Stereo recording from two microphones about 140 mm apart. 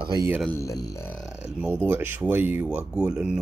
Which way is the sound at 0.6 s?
25° left (ahead or behind).